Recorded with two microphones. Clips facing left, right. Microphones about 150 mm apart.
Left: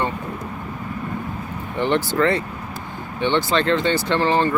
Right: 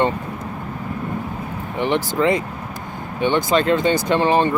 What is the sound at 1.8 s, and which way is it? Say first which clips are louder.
Speech: even; 10° right (ahead or behind).